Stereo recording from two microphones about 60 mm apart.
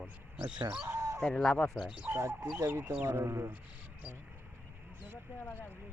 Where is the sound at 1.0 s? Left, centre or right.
Right.